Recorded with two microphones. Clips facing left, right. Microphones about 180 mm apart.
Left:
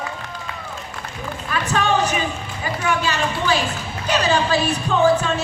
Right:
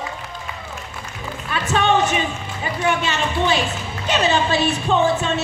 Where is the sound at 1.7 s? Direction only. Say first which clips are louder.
Right 2 dB; 20° right (ahead or behind).